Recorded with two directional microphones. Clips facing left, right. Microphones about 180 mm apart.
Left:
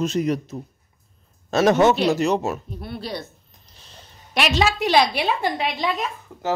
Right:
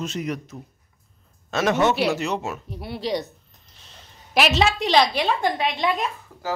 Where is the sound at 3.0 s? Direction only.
15° right (ahead or behind).